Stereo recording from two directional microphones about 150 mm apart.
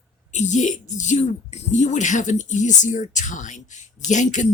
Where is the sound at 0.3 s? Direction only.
50° left (ahead or behind).